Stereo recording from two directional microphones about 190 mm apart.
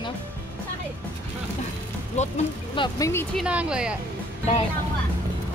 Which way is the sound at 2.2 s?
40° left (ahead or behind).